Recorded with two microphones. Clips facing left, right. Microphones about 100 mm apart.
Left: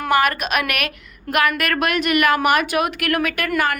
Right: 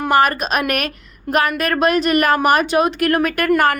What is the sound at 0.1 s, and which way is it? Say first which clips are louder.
A woman's voice: right 2 dB; 35° right (ahead or behind).